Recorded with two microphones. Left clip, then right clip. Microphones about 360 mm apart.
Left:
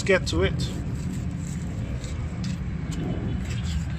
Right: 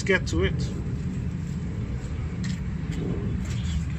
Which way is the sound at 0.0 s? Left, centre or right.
Centre.